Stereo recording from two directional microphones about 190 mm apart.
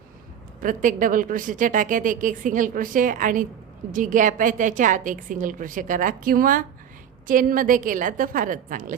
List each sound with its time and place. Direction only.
0.6 s a woman's voice: 45° right (ahead or behind)